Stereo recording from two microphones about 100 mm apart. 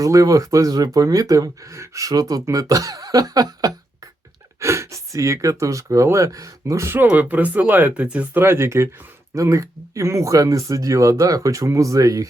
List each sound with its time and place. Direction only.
0.0 s speech: 35° right (ahead or behind)